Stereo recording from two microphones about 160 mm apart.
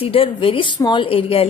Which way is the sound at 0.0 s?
35° left (ahead or behind).